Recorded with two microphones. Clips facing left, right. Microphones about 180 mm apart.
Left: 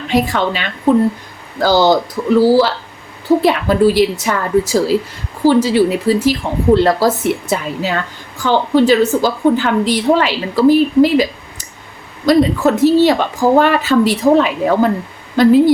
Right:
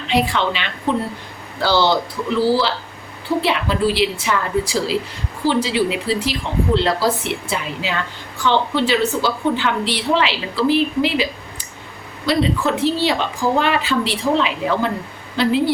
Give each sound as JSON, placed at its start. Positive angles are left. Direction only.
{"t": 0.1, "sound": "a woman's voice", "side_deg": 45}